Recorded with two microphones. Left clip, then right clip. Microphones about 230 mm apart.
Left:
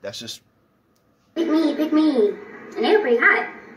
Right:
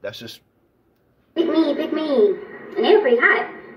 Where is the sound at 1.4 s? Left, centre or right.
Centre.